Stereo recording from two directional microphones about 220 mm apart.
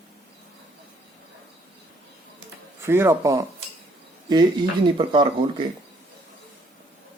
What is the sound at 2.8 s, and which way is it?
Speech, 10° right (ahead or behind).